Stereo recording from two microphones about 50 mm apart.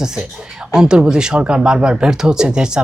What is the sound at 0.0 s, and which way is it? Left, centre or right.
A woman's voice, centre.